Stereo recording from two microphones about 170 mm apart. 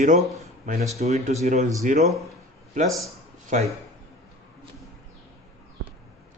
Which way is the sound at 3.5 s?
45° right (ahead or behind).